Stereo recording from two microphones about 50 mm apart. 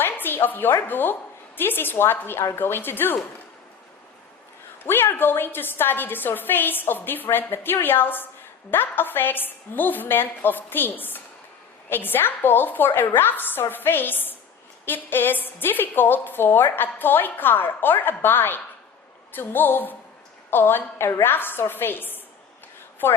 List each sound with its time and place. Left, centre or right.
0.0 s music: left
0.8 s a woman's voice: left
4.8 s a woman's voice: left